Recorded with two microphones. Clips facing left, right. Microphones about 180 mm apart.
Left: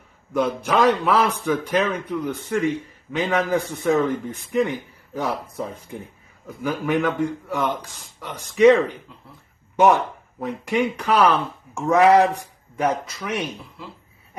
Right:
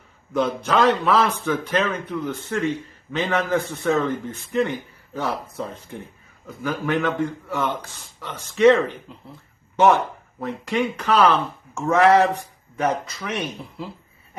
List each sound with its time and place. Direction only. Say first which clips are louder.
0.3 s speech: even; 10° left (ahead or behind)